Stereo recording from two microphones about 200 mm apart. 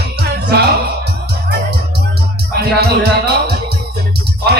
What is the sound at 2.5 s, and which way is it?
Music, 55° right (ahead or behind).